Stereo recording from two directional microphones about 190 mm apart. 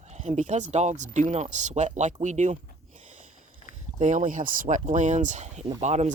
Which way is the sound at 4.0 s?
40° right (ahead or behind).